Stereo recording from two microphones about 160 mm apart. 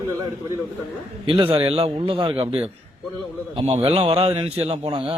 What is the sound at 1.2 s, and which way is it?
A man's voice, 35° right (ahead or behind).